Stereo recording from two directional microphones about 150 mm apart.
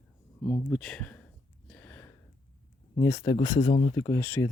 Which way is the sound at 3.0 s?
25° left (ahead or behind).